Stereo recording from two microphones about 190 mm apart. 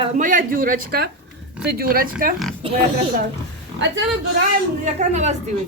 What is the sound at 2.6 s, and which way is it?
Speech, 30° right (ahead or behind).